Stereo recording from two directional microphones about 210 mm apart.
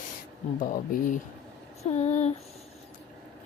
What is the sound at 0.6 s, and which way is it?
Speech, 40° left (ahead or behind).